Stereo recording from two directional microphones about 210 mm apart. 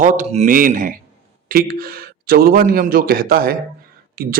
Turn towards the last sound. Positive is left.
turn(degrees=-45)  # may be behind; listen again after turning